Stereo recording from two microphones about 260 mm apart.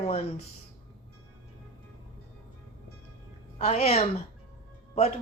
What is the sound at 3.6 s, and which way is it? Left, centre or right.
Speech, left.